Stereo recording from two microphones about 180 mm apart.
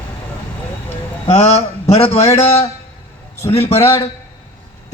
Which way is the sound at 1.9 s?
35° left (ahead or behind).